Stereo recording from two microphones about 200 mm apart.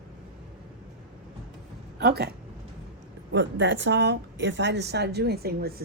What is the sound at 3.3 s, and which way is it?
A woman's voice, 65° right (ahead or behind).